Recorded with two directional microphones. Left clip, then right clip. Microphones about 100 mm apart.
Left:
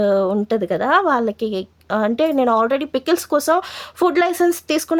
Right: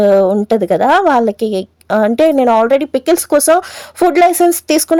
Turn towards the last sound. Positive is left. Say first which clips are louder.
# right 7 dB
turn(degrees=-50)  # may be behind; listen again after turning